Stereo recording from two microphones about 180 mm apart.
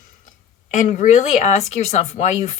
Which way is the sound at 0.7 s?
45° left (ahead or behind).